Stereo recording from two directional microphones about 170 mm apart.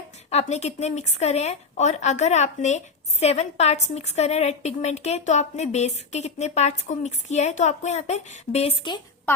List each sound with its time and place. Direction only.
0.3 s a woman's voice: 40° left (ahead or behind)